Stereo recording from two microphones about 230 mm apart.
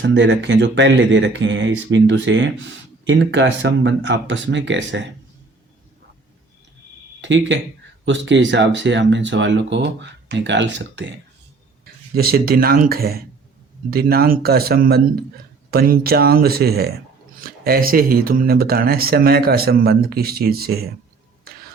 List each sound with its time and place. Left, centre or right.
0.0 s speech: right
7.2 s speech: right
12.1 s speech: right